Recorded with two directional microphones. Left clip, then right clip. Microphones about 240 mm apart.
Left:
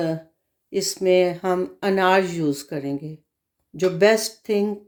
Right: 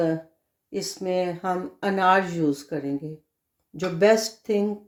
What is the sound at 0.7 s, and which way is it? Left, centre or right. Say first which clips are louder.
Speech: left 8 dB; left.